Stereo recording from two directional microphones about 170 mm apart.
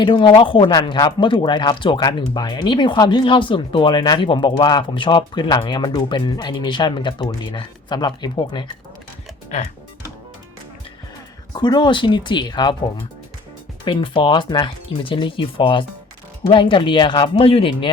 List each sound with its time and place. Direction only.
0.0 s speech: 30° left (ahead or behind)
11.5 s speech: 25° left (ahead or behind)
13.8 s speech: 30° left (ahead or behind)